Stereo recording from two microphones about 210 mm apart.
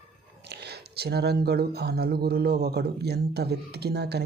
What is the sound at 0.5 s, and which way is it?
Speech, 50° right (ahead or behind).